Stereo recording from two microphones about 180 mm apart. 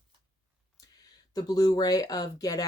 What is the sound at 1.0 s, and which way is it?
Speech, 20° left (ahead or behind).